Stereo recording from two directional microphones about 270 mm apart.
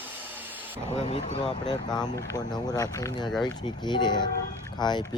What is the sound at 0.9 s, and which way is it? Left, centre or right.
Speech, left.